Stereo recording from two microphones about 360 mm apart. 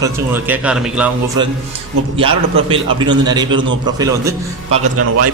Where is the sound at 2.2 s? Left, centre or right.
Centre.